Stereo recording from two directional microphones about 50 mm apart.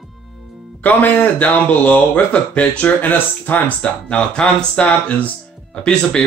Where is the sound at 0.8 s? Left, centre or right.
Left.